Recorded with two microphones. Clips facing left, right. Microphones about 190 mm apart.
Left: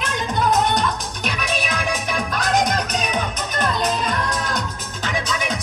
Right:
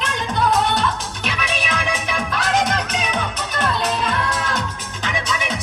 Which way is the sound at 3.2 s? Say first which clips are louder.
Even; 40° left (ahead or behind).